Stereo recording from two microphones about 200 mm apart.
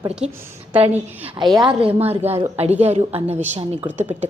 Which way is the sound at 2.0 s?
30° right (ahead or behind).